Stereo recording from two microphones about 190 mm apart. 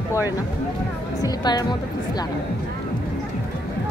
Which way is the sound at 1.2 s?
20° left (ahead or behind).